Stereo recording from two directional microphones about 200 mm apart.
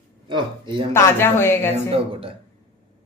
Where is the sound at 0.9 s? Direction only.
10° left (ahead or behind).